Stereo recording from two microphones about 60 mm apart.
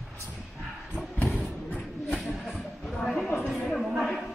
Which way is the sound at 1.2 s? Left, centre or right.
Left.